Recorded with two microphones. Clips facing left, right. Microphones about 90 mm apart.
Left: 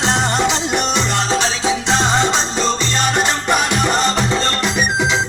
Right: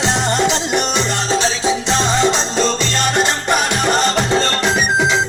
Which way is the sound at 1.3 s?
65° left (ahead or behind).